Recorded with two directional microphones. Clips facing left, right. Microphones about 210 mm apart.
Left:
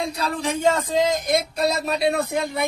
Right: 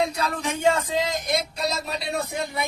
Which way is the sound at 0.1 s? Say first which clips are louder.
Left 2 dB; 35° left (ahead or behind).